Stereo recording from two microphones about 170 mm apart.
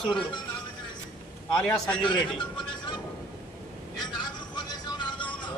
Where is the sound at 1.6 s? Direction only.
5° left (ahead or behind).